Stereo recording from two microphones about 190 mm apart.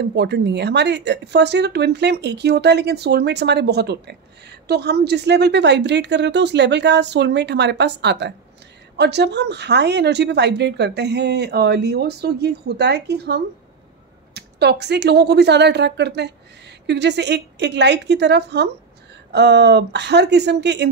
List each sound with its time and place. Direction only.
0.0 s speech: 65° right (ahead or behind)